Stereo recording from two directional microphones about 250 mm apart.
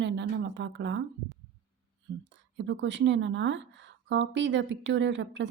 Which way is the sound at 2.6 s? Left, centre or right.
Right.